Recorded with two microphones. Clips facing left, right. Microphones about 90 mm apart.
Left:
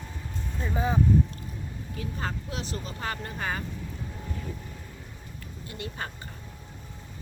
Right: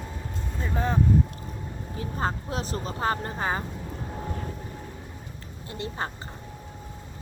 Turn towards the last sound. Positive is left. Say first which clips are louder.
# right 4 dB
turn(degrees=-30)  # may be behind; listen again after turning